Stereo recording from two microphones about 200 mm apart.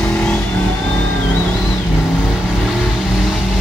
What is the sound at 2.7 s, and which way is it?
Vehicle, centre (ahead or behind).